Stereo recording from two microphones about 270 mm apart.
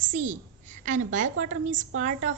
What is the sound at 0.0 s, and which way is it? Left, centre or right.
A woman's voice, right.